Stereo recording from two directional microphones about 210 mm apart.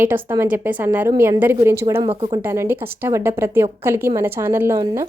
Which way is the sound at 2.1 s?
25° right (ahead or behind).